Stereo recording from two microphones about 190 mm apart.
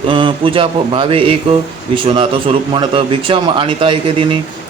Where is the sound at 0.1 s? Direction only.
25° right (ahead or behind).